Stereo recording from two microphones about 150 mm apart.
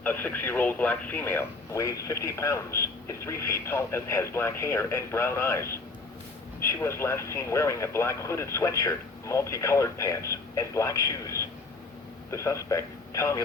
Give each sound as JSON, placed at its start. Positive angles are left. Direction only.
{"t": 0.0, "sound": "a man's voice", "side_deg": 10}